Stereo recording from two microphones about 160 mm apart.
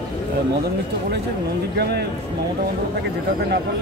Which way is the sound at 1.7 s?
90° right.